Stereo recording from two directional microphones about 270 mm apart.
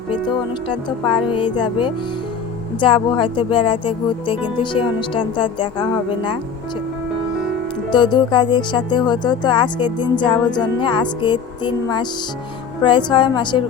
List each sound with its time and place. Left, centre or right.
0.7 s speech: centre
7.9 s speech: centre